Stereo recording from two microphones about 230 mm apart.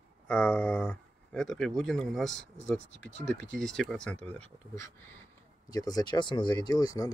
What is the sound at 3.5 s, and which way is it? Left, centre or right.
Speech, centre.